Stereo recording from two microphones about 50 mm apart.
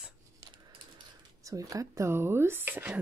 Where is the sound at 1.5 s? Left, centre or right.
Right.